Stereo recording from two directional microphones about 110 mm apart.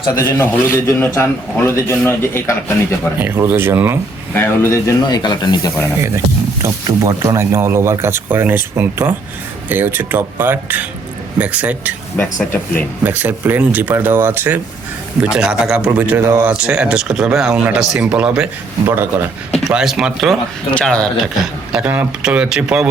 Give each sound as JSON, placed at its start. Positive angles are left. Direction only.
{"t": 0.2, "sound": "a man's voice", "side_deg": 25}
{"t": 3.2, "sound": "speech", "side_deg": -20}
{"t": 4.4, "sound": "a man's voice", "side_deg": 25}
{"t": 5.0, "sound": "speech", "side_deg": 40}
{"t": 6.0, "sound": "speech", "side_deg": -25}
{"t": 13.1, "sound": "speech", "side_deg": -15}
{"t": 15.2, "sound": "speech", "side_deg": -5}
{"t": 19.6, "sound": "speech", "side_deg": -5}
{"t": 20.7, "sound": "speech", "side_deg": 10}